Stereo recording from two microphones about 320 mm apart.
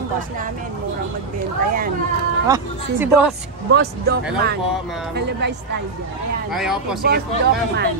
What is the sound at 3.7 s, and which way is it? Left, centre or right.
A woman's voice, right.